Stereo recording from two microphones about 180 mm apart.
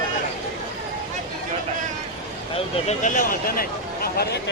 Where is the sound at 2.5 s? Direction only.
40° left (ahead or behind).